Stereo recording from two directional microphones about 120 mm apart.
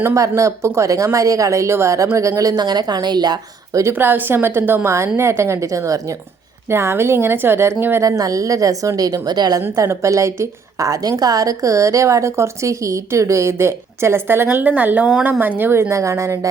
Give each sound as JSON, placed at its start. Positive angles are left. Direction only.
{"t": 0.0, "sound": "a woman's voice", "side_deg": -25}
{"t": 3.9, "sound": "a woman's voice", "side_deg": -15}